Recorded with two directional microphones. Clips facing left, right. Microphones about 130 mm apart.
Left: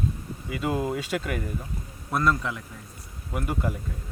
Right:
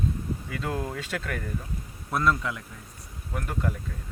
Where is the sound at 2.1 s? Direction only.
Centre (ahead or behind).